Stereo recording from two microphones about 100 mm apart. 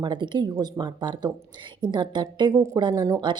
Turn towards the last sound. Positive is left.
turn(degrees=-45)  # may be behind; listen again after turning